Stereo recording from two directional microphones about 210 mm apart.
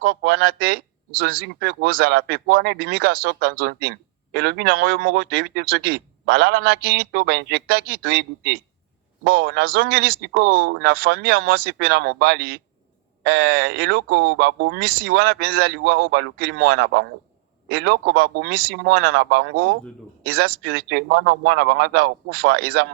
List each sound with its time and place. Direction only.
0.0 s speech: 50° right (ahead or behind)